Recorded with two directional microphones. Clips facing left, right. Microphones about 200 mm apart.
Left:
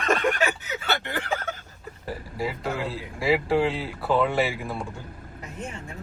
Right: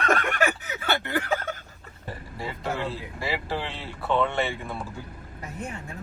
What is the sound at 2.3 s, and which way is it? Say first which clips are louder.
Speech: left 2 dB; centre (ahead or behind).